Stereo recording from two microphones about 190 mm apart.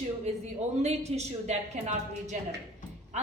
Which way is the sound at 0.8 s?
35° right (ahead or behind).